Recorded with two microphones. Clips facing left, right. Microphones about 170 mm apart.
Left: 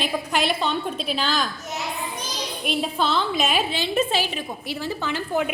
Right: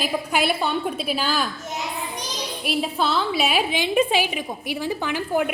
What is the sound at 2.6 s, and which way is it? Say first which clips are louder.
A woman's voice: right 1 dB; 5° right (ahead or behind).